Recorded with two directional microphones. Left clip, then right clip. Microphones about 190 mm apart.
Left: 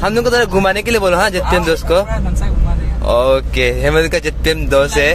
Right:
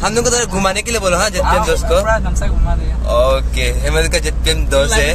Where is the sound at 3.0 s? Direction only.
40° left (ahead or behind).